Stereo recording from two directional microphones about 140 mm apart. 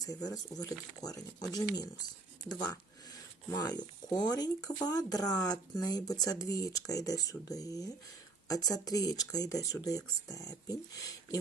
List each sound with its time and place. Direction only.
0.0 s speech: 25° left (ahead or behind)